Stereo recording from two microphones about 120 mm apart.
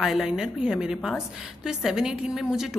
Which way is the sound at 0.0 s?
Centre (ahead or behind).